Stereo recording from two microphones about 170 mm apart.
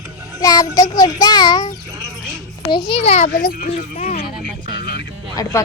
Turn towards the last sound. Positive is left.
turn(degrees=20)  # may be behind; listen again after turning